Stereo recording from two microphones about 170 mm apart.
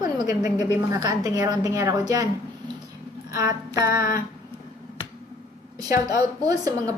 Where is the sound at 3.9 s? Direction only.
60° left (ahead or behind).